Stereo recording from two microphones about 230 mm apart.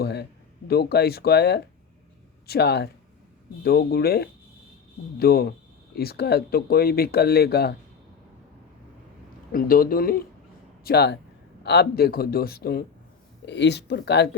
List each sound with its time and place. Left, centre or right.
0.0 s a sound: left
0.7 s speech: left
9.5 s a man's voice: left